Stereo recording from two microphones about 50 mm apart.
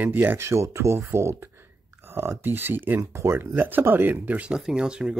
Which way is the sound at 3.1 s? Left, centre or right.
Right.